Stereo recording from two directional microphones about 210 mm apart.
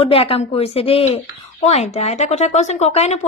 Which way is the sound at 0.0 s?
25° left (ahead or behind).